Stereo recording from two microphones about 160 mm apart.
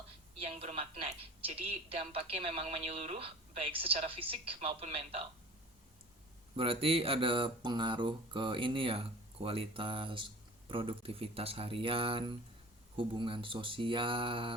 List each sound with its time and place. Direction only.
0.4 s speech: 40° right (ahead or behind)
6.6 s speech: 35° right (ahead or behind)